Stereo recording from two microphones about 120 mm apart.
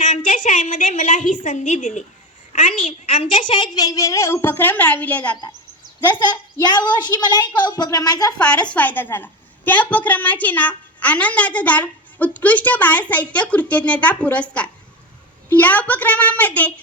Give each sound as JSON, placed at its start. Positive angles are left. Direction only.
{"t": 0.3, "sound": "a woman's voice", "side_deg": 90}
{"t": 2.5, "sound": "a sound", "side_deg": 90}
{"t": 3.1, "sound": "a woman's voice", "side_deg": 45}
{"t": 6.1, "sound": "a woman's voice", "side_deg": 40}
{"t": 8.4, "sound": "a woman's voice", "side_deg": 10}